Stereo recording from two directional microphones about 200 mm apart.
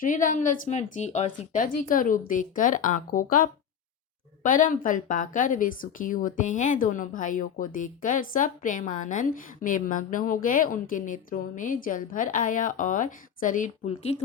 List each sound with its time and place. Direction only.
0.0 s a woman's voice: 40° left (ahead or behind)